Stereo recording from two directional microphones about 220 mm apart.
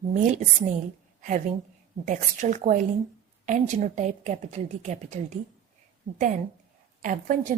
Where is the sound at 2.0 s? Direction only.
35° right (ahead or behind).